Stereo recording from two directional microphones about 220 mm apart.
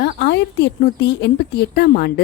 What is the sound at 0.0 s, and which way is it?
Speech, 50° left (ahead or behind).